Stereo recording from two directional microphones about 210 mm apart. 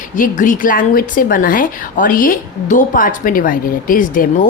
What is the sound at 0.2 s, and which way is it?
A woman's voice, 40° left (ahead or behind).